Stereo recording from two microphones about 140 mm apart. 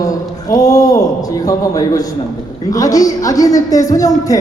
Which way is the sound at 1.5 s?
25° left (ahead or behind).